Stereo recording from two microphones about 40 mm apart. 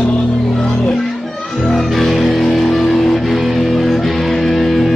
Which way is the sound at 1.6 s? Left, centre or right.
Centre.